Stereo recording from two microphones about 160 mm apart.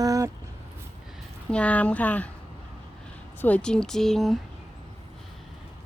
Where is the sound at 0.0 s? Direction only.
20° right (ahead or behind).